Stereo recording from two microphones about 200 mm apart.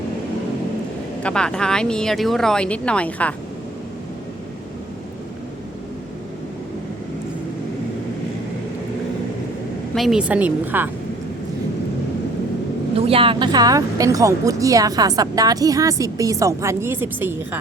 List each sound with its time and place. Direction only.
1.2 s speech: 5° left (ahead or behind)
9.9 s speech: centre (ahead or behind)
13.0 s speech: 30° right (ahead or behind); by 17.6 s 10° right (ahead or behind)